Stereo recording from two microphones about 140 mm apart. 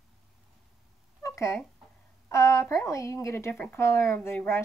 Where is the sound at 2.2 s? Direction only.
20° left (ahead or behind).